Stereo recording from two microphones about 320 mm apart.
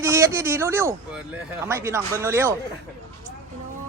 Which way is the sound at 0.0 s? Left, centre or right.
Centre.